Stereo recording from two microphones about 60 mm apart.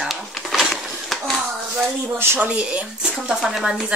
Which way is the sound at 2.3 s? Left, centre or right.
Right.